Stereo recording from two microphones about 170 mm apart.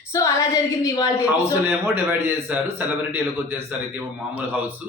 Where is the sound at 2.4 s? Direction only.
10° right (ahead or behind).